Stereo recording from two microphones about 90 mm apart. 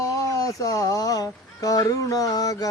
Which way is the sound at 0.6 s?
40° left (ahead or behind).